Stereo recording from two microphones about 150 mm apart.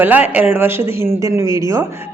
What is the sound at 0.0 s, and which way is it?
Speech, 10° right (ahead or behind).